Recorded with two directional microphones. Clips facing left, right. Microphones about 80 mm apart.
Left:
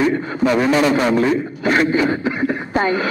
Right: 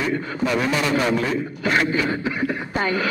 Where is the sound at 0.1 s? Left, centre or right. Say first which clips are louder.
Left 5 dB; left.